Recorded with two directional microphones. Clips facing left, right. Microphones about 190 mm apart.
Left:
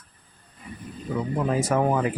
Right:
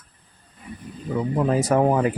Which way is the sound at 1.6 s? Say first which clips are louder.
Right 4 dB; 35° right (ahead or behind).